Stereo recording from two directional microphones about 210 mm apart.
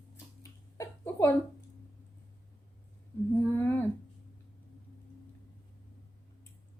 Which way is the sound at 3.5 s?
10° left (ahead or behind).